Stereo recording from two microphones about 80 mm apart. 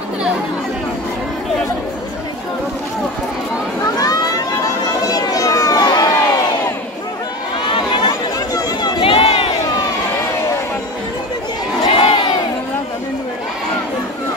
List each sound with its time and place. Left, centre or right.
3.8 s a sound: left
7.6 s crowd: left
8.0 s chatter: left
11.8 s crowd: left